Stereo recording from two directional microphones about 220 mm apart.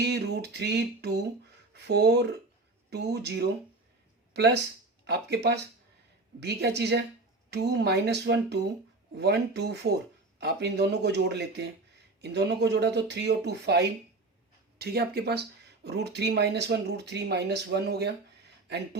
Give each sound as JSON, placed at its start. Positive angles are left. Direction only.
{"t": 0.0, "sound": "speech", "side_deg": -50}